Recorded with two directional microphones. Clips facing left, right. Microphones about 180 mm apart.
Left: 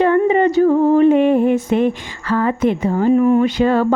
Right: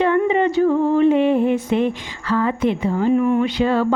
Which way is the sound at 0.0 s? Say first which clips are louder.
Left 3 dB; 45° left (ahead or behind).